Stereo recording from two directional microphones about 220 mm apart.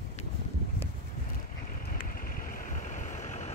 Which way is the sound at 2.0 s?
40° left (ahead or behind).